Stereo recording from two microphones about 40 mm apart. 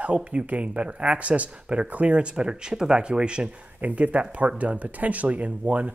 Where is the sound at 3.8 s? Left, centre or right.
Right.